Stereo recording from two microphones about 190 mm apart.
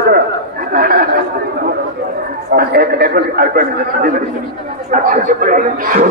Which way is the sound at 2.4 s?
55° right (ahead or behind).